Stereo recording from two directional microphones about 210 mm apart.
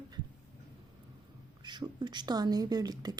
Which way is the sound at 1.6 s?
20° right (ahead or behind).